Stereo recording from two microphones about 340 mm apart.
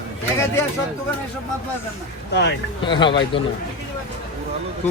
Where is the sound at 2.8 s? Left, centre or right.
Centre.